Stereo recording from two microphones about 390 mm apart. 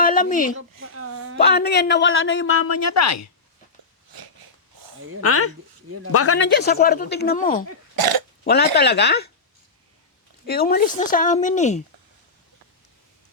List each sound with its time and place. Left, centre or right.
0.0 s a sound: left
0.9 s a sound: right
1.4 s a man's voice: left
5.2 s a man's voice: left
7.9 s speech: right
8.4 s a man's voice: left
10.4 s a man's voice: left